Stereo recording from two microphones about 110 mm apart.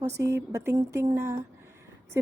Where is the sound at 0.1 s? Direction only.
25° right (ahead or behind).